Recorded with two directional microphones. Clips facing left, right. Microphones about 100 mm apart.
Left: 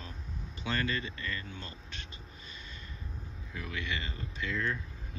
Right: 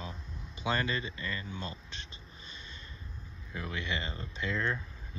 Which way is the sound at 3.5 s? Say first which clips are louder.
Right 1 dB; 25° right (ahead or behind).